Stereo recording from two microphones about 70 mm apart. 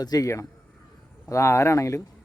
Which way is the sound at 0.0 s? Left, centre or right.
Left.